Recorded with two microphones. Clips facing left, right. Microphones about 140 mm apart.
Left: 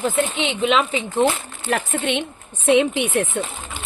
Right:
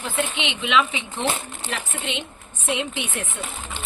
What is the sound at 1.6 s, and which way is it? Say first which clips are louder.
Speech: left 9 dB; 55° left (ahead or behind).